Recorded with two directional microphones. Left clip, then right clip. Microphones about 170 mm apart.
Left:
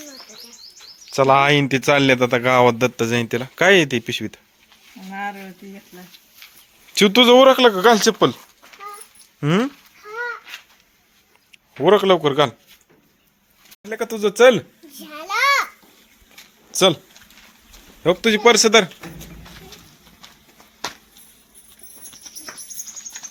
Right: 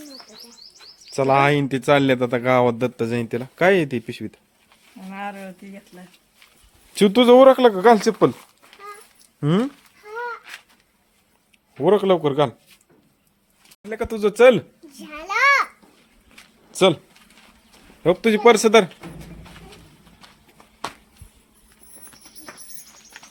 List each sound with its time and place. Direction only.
1.1 s a man's voice: 15° left (ahead or behind)
5.0 s a sound: 15° right (ahead or behind)
6.9 s a man's voice: 15° right (ahead or behind)
11.9 s a man's voice: 10° right (ahead or behind)
13.8 s speech: 5° left (ahead or behind)
14.9 s babbling: 5° right (ahead or behind)
16.7 s speech: 5° right (ahead or behind)
18.0 s a man's voice: 10° right (ahead or behind)